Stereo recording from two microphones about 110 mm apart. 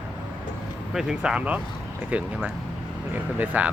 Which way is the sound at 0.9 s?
5° right (ahead or behind).